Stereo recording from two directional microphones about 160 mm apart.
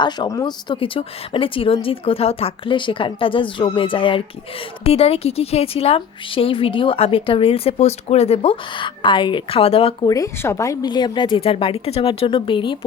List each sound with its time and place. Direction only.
0.0 s a woman's voice: 25° left (ahead or behind)
10.1 s a woman's voice: 20° left (ahead or behind)